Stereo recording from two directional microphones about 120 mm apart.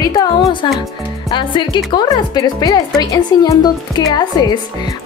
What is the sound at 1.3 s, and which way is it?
A woman's voice, 40° left (ahead or behind).